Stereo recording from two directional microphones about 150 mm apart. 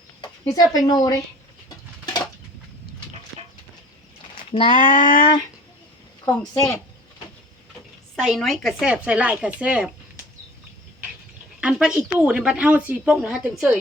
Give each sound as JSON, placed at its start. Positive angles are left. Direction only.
{"t": 0.2, "sound": "a sound", "side_deg": 25}
{"t": 0.9, "sound": "a woman's voice", "side_deg": 25}
{"t": 4.5, "sound": "speech", "side_deg": 35}
{"t": 4.8, "sound": "child singing", "side_deg": 65}
{"t": 6.5, "sound": "a woman's voice", "side_deg": 20}
{"t": 8.1, "sound": "speech", "side_deg": 0}
{"t": 11.6, "sound": "speech", "side_deg": -5}